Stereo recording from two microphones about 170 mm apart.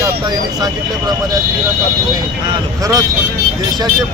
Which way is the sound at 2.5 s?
20° right (ahead or behind).